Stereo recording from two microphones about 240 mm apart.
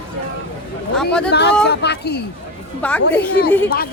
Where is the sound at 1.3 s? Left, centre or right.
Left.